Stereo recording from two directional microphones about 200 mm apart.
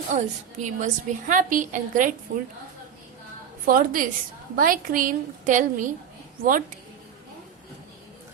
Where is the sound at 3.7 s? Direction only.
45° right (ahead or behind).